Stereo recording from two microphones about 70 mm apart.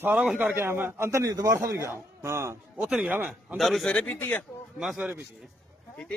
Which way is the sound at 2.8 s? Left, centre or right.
Centre.